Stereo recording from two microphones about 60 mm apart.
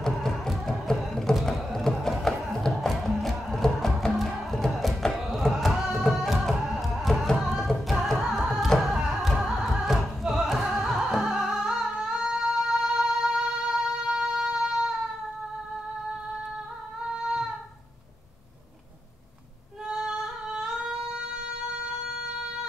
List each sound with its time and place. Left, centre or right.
0.0 s music: centre
17.1 s child singing: centre
19.9 s singing: centre